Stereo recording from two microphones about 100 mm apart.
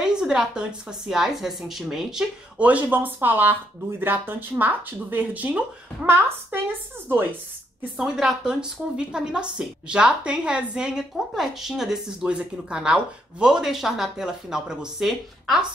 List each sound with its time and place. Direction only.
0.0 s a woman's voice: 5° right (ahead or behind)
2.6 s speech: 15° right (ahead or behind)
7.8 s a woman's voice: 10° right (ahead or behind)